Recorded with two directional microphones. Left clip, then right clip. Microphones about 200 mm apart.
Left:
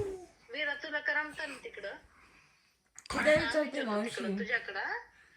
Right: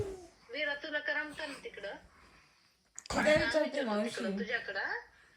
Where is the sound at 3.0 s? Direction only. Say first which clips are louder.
Even; 15° right (ahead or behind).